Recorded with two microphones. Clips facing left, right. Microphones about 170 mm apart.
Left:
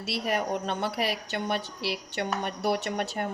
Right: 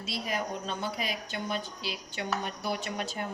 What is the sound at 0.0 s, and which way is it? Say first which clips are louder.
A woman's voice: left 5 dB; 65° left (ahead or behind).